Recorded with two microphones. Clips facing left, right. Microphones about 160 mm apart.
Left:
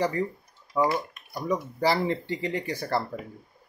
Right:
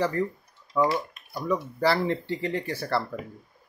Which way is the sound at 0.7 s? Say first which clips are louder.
Right 1 dB; 10° left (ahead or behind).